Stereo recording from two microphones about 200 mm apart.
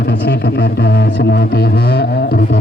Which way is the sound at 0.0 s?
55° left (ahead or behind).